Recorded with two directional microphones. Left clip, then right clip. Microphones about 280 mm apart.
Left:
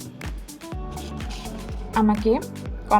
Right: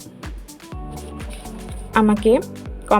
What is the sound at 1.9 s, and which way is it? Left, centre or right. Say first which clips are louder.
Speech: right 5 dB; right.